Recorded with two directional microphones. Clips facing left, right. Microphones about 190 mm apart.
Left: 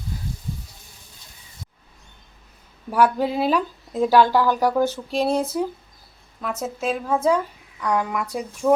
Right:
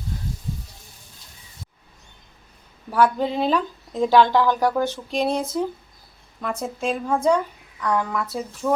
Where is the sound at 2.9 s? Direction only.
10° left (ahead or behind).